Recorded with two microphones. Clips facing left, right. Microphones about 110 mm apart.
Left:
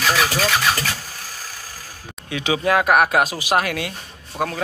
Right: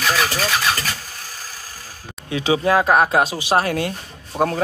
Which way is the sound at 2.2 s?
30° right (ahead or behind).